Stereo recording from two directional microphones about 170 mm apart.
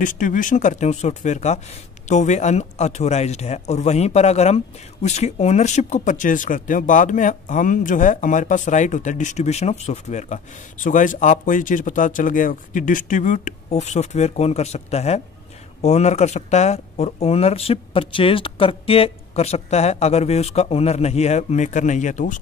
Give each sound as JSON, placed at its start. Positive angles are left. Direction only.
{"t": 0.0, "sound": "speech", "side_deg": 50}